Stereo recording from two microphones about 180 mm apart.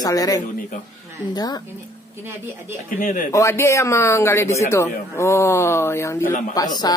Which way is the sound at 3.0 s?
45° left (ahead or behind).